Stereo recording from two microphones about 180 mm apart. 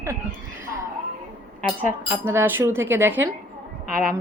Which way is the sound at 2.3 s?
10° right (ahead or behind).